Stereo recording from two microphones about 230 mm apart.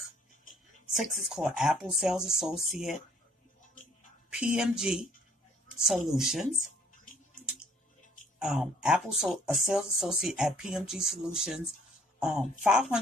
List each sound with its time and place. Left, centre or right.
0.9 s speech: centre
4.3 s speech: centre
8.4 s speech: centre